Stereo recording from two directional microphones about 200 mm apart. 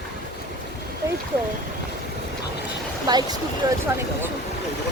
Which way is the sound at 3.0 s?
20° right (ahead or behind).